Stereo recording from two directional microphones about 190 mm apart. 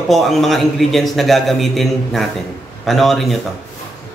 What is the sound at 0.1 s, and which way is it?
Speech, centre (ahead or behind).